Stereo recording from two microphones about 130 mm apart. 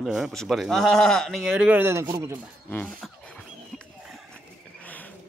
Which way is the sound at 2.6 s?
15° left (ahead or behind).